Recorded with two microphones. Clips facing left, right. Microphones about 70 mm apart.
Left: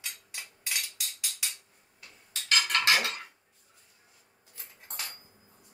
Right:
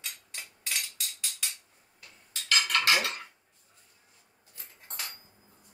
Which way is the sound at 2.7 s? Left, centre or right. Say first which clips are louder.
Even; left.